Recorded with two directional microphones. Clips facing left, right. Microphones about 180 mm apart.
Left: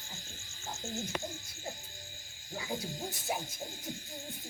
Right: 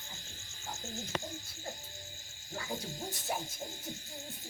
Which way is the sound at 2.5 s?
10° left (ahead or behind).